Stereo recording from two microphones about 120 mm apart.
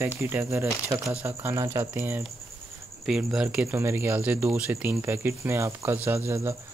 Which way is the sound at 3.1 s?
5° right (ahead or behind).